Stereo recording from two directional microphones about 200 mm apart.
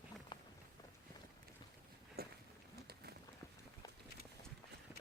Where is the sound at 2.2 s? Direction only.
50° right (ahead or behind).